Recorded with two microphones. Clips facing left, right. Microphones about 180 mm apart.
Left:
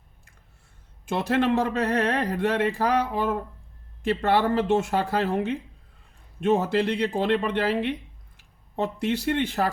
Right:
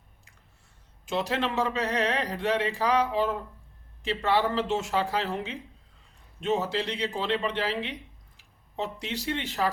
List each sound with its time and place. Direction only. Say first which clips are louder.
1.0 s speech: left 5 dB; 55° left (ahead or behind)